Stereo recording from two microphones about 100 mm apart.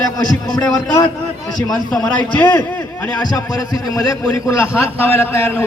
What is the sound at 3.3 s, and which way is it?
A man's voice, 40° left (ahead or behind).